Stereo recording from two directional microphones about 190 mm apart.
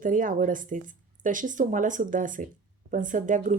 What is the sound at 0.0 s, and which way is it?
Speech, 45° right (ahead or behind).